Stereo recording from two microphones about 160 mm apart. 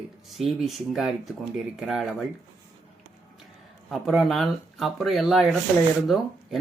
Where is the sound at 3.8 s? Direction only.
Centre (ahead or behind).